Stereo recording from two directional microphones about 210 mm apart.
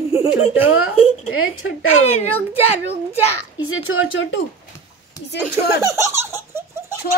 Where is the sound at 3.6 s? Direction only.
85° left.